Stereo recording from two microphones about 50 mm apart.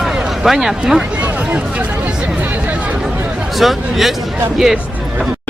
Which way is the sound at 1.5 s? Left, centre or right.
Right.